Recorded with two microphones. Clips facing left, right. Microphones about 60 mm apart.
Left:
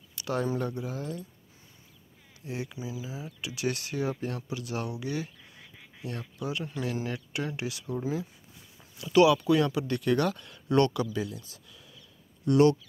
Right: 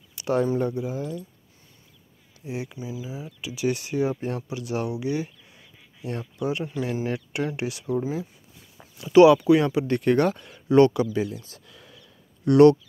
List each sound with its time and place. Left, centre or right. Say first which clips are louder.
0.1 s a sound: right 7 dB; right
0.6 s speech: right 6 dB; centre
2.4 s speech: right 4 dB; centre
2.8 s speech: right 3 dB; centre
3.6 s speech: right 6 dB; centre
4.1 s speech: right 4 dB; right; by 5.3 s centre
6.8 s speech: right 4 dB; centre
7.1 s speech: right 6 dB; right
8.0 s speech: right 3 dB; centre
8.9 s speech: right 7 dB; right
11.1 s speech: right 6 dB; right
11.4 s a sound: right 4 dB; right
12.4 s speech: right 7 dB; right